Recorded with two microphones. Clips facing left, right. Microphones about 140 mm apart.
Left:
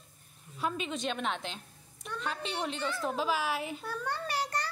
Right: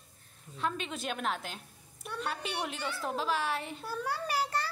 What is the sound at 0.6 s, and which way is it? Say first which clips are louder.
A woman's voice: left 1 dB; 5° left (ahead or behind).